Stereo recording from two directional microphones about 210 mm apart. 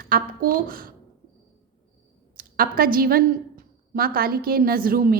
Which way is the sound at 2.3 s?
45° right (ahead or behind).